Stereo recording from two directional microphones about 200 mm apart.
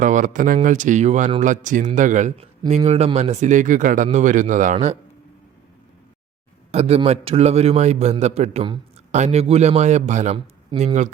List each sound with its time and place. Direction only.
0.0 s a man's voice: 40° right (ahead or behind)
6.7 s a man's voice: 30° right (ahead or behind)